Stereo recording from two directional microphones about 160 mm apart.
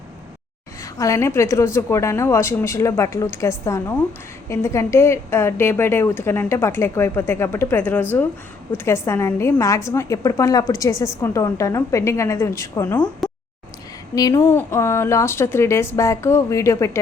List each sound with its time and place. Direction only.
0.9 s a woman's voice: 20° left (ahead or behind)
14.2 s a woman's voice: 20° left (ahead or behind)